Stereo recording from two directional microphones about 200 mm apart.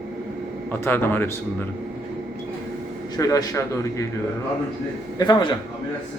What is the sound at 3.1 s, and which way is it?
Speech, 15° left (ahead or behind).